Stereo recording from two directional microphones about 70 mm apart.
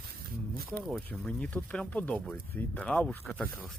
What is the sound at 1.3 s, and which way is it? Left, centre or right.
Speech, centre.